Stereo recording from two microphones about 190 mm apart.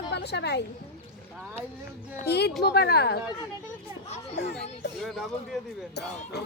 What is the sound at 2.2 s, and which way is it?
Speech, 60° left (ahead or behind).